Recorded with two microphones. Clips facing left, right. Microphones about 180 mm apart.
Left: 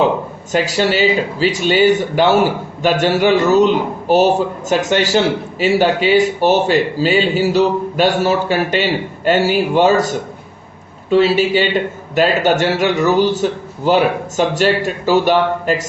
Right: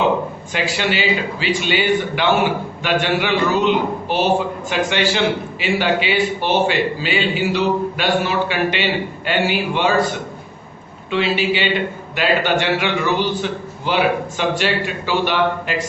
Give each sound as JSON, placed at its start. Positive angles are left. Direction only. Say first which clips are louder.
{"t": 0.5, "sound": "a man's voice", "louder": "left 6 dB", "side_deg": 40}